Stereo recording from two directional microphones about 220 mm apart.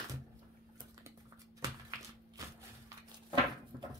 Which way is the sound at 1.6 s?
15° right (ahead or behind).